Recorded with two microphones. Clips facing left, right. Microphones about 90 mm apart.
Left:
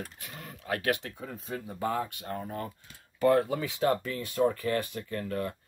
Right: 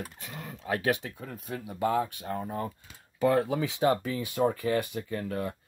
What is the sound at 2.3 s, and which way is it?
Speech, 20° right (ahead or behind).